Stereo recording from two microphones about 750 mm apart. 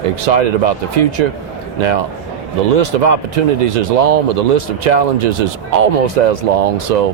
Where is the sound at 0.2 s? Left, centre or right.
Right.